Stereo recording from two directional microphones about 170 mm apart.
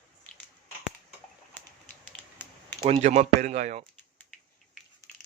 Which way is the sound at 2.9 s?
40° right (ahead or behind).